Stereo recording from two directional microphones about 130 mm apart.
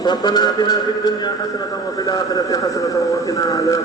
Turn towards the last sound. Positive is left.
turn(degrees=25)  # may be behind; listen again after turning